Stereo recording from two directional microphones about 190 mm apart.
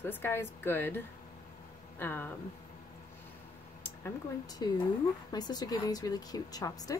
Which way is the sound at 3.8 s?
15° left (ahead or behind).